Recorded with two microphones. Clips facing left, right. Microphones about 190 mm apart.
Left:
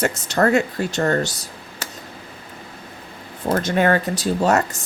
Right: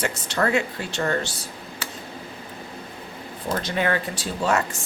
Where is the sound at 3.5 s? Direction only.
50° left (ahead or behind).